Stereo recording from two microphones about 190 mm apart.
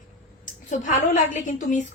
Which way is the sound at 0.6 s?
40° left (ahead or behind).